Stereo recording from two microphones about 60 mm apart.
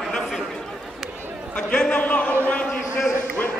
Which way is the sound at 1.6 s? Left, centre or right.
Centre.